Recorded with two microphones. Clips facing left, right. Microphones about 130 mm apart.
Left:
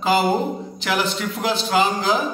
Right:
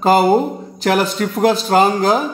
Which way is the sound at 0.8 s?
45° right (ahead or behind).